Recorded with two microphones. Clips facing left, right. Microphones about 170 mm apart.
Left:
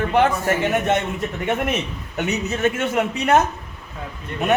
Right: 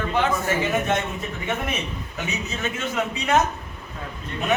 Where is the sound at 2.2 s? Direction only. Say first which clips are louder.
Left 8 dB; 60° left (ahead or behind).